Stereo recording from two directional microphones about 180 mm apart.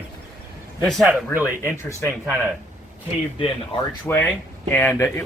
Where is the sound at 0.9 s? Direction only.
Centre (ahead or behind).